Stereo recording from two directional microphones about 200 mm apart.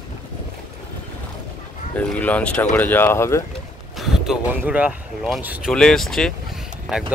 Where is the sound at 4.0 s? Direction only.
Centre (ahead or behind).